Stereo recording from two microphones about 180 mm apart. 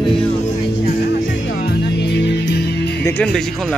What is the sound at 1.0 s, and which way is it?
Music, 65° left (ahead or behind).